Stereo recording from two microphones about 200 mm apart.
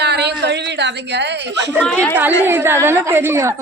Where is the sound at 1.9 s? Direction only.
5° left (ahead or behind).